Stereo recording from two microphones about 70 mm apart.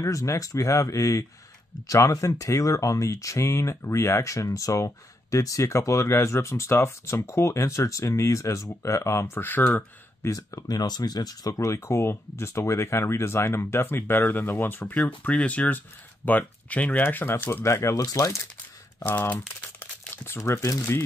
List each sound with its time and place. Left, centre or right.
0.0 s speech: left
10.2 s speech: left
15.0 s speech: centre
17.6 s speech: left
19.0 s speech: left
19.8 s crumpling: left
20.3 s speech: left